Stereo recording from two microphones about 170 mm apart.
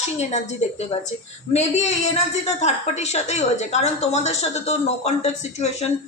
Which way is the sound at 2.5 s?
40° left (ahead or behind).